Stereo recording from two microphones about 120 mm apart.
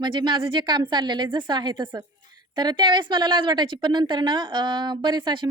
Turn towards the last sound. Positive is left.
turn(degrees=-40)  # may be behind; listen again after turning